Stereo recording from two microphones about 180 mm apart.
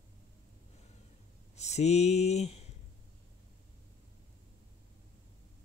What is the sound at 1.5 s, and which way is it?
Speech, 40° left (ahead or behind).